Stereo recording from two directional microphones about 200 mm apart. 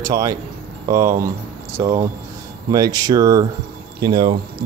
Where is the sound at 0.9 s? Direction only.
40° right (ahead or behind).